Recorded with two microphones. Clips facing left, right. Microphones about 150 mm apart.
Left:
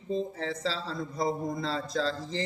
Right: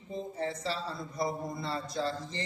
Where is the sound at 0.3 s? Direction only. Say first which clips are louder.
Left 1 dB; 90° left.